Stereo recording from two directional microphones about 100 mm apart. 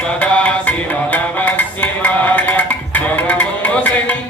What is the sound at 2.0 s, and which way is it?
Tabla, 15° left (ahead or behind).